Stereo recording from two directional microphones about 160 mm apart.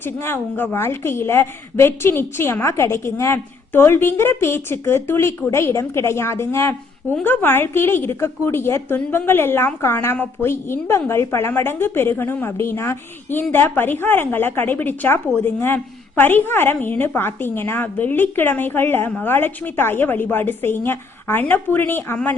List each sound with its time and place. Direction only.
0.0 s a woman's voice: 15° left (ahead or behind)